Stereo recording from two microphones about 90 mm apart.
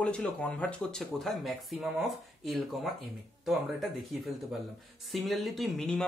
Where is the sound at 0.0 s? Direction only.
10° left (ahead or behind).